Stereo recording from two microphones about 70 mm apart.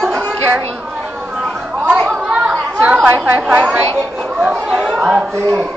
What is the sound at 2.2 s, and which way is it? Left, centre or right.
Chatter, centre.